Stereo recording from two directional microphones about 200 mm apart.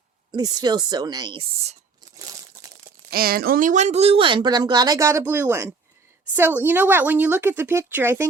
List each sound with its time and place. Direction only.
0.3 s speech: 20° right (ahead or behind)
3.1 s a woman's voice: 50° right (ahead or behind); by 8.3 s 10° right (ahead or behind)